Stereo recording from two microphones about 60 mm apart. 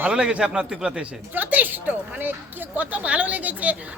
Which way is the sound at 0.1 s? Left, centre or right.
Centre.